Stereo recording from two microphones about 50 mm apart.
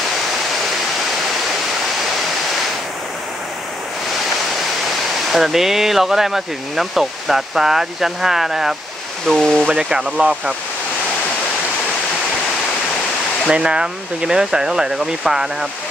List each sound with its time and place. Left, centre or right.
5.3 s speech: centre
9.4 s speech: centre
9.8 s speech: right
13.5 s speech: centre